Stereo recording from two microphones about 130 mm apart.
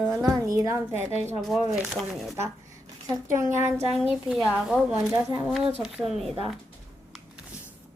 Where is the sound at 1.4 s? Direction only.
Centre (ahead or behind).